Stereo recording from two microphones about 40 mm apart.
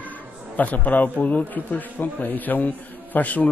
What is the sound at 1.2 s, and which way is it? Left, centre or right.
A man's voice, left.